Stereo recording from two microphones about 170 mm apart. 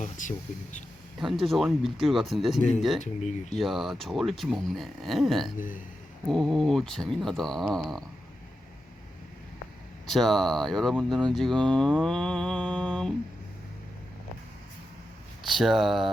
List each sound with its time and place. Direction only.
0.0 s speech: 45° left (ahead or behind)
1.2 s speech: centre (ahead or behind)
2.6 s speech: 45° left (ahead or behind)
3.5 s speech: centre (ahead or behind)
5.5 s speech: 50° left (ahead or behind)
6.2 s speech: centre (ahead or behind)
10.1 s speech: centre (ahead or behind)
15.4 s speech: centre (ahead or behind)